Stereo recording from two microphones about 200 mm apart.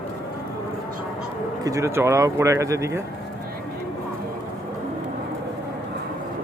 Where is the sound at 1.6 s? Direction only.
15° right (ahead or behind).